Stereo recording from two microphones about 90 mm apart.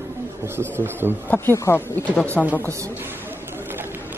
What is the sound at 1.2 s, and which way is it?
Speech, 20° left (ahead or behind).